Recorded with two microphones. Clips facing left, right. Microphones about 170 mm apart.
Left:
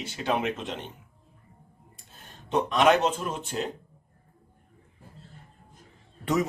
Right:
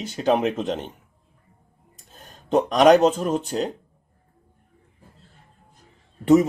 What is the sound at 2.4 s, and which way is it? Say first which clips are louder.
Speech: right 6 dB; 40° right (ahead or behind).